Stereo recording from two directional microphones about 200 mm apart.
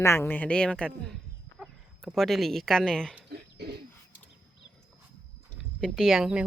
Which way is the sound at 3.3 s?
50° right (ahead or behind).